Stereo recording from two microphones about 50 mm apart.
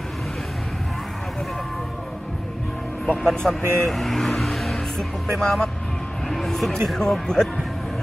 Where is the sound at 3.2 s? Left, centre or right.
Centre.